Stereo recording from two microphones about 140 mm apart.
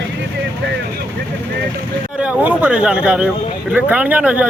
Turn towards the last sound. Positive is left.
turn(degrees=-10)  # may be behind; listen again after turning